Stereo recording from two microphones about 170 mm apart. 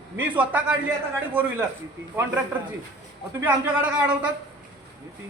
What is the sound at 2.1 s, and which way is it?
Speech, 10° right (ahead or behind).